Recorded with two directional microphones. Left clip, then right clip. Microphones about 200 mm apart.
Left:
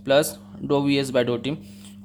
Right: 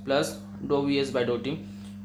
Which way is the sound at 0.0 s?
40° left (ahead or behind).